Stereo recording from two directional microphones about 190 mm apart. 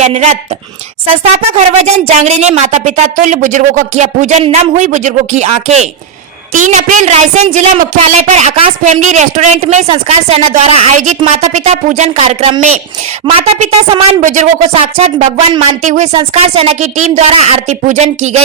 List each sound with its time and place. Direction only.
0.0 s a woman's voice: 35° right (ahead or behind)